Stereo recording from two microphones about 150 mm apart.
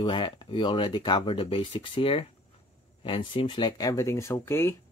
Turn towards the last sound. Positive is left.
turn(degrees=15)  # may be behind; listen again after turning